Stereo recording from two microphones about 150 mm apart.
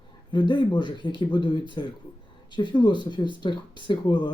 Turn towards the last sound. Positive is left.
turn(degrees=30)  # may be behind; listen again after turning